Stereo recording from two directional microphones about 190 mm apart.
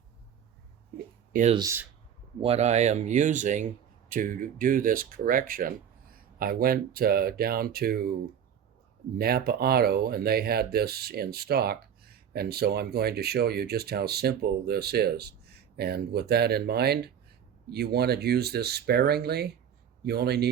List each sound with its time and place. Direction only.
1.3 s speech: 40° right (ahead or behind)
1.5 s speech: 15° right (ahead or behind)
2.4 s speech: 35° right (ahead or behind); by 8.1 s 55° right (ahead or behind)
9.1 s speech: 55° right (ahead or behind)